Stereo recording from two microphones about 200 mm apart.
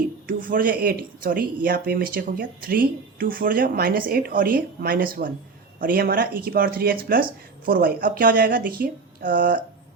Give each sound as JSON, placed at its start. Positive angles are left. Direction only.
{"t": 0.3, "sound": "speech", "side_deg": -45}